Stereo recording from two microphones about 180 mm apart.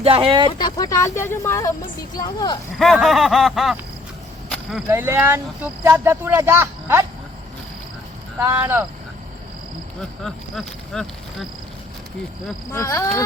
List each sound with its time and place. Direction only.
0.0 s speech: 30° right (ahead or behind)
0.6 s speech: 20° left (ahead or behind)
2.7 s speech: centre (ahead or behind)
4.9 s speech: 15° right (ahead or behind)
8.4 s speech: 10° right (ahead or behind)
10.0 s speech: centre (ahead or behind)
12.7 s speech: 15° left (ahead or behind)